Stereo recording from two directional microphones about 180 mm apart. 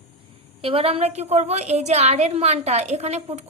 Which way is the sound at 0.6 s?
30° right (ahead or behind).